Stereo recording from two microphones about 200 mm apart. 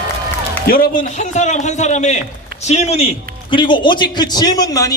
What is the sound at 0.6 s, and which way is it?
A man's voice, 45° left (ahead or behind).